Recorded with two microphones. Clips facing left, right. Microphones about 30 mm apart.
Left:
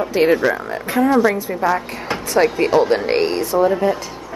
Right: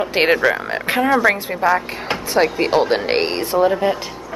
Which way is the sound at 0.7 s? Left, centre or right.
Right.